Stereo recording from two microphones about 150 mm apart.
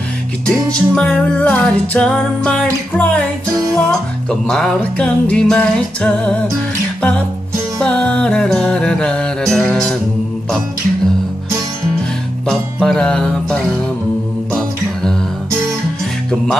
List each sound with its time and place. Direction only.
0.5 s music: 5° left (ahead or behind)
12.8 s music: 5° left (ahead or behind)